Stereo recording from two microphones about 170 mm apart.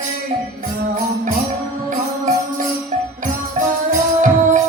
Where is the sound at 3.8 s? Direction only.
50° right (ahead or behind).